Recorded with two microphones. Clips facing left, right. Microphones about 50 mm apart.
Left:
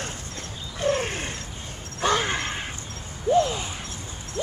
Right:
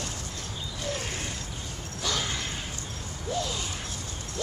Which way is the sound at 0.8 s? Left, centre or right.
Left.